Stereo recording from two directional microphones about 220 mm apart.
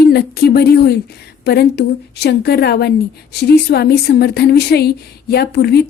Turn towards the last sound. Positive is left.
turn(degrees=45)  # may be behind; listen again after turning